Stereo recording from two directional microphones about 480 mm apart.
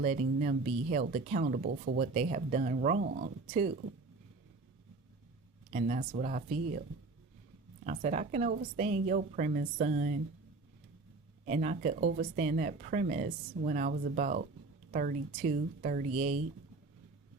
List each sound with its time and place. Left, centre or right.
0.0 s speech: centre
5.7 s speech: centre
7.9 s speech: centre
11.4 s speech: centre